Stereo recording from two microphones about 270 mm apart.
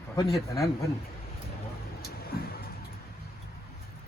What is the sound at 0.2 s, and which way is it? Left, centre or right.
Speech, centre.